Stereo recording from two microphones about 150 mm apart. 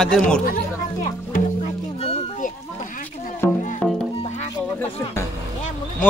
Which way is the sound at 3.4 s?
15° left (ahead or behind).